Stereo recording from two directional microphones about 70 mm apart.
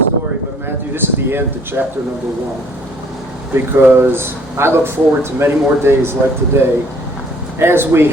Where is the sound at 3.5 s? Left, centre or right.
Right.